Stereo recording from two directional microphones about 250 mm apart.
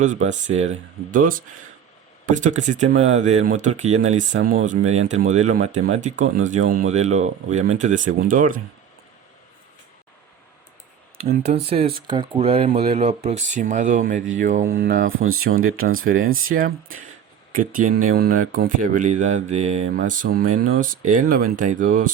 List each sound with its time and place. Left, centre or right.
0.0 s speech: right
11.4 s speech: right